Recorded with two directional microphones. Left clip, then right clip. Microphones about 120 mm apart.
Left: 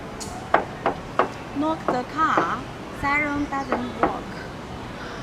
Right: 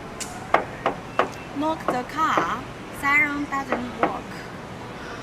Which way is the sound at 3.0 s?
20° right (ahead or behind).